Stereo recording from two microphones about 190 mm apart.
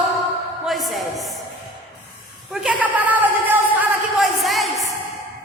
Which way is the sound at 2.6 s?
10° right (ahead or behind).